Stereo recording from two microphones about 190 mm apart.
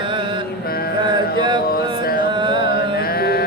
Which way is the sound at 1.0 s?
25° right (ahead or behind).